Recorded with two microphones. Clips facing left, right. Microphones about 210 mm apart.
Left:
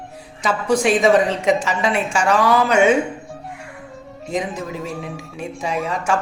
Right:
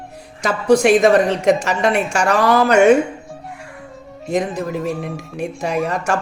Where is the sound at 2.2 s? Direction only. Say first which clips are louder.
Right 1 dB; 40° right (ahead or behind).